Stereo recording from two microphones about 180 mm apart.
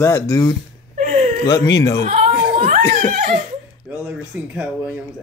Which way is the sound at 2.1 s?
35° right (ahead or behind).